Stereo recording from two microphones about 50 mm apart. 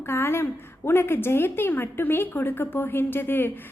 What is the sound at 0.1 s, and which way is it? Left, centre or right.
A woman's voice, left.